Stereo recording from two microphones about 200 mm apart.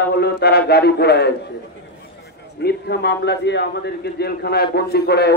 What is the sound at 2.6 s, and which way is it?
A man's voice, 55° left (ahead or behind).